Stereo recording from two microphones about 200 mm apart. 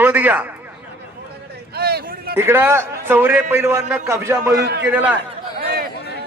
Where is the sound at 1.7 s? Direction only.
50° right (ahead or behind).